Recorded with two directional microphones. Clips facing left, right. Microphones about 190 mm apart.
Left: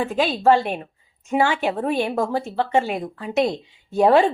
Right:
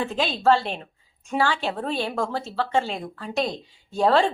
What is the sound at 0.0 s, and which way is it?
A woman's voice, 10° left (ahead or behind).